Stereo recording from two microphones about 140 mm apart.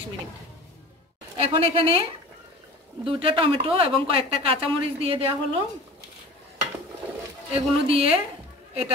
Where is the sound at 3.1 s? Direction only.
40° right (ahead or behind).